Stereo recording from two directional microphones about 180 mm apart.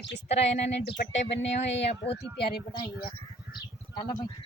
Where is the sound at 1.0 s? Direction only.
50° left (ahead or behind).